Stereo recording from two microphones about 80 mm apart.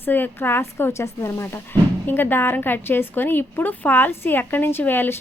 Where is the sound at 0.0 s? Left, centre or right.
Left.